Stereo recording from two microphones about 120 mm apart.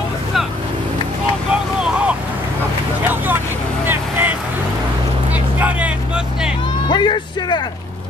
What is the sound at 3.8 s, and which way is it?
Vehicle, 15° right (ahead or behind).